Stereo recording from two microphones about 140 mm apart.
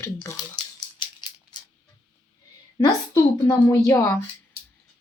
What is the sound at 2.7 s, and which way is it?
A woman's voice, 35° left (ahead or behind).